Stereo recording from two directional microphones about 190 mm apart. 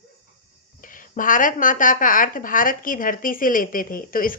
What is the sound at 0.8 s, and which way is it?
A woman's voice, 45° left (ahead or behind).